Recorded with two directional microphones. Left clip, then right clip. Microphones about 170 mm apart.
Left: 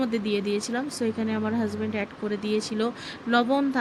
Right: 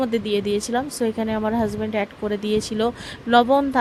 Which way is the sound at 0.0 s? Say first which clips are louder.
Right 5 dB; 45° right (ahead or behind).